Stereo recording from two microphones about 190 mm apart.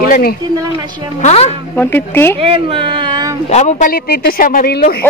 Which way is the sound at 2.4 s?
30° right (ahead or behind).